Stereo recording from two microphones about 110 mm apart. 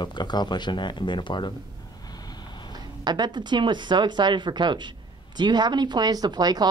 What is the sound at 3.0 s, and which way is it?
Speech, 40° right (ahead or behind).